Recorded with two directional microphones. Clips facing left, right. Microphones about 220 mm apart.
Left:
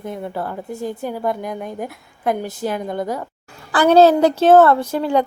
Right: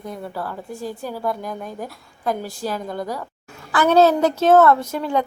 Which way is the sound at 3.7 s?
35° left (ahead or behind).